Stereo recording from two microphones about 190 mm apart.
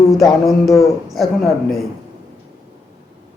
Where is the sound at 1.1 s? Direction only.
Centre (ahead or behind).